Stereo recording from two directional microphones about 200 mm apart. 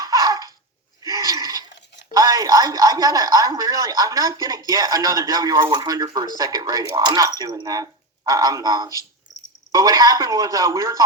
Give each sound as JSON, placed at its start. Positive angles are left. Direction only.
{"t": 0.0, "sound": "dog", "side_deg": -20}
{"t": 1.0, "sound": "gasp", "side_deg": -15}
{"t": 2.1, "sound": "speech", "side_deg": -20}